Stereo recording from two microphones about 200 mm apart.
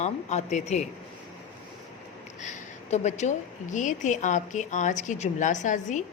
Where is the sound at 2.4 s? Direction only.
35° left (ahead or behind).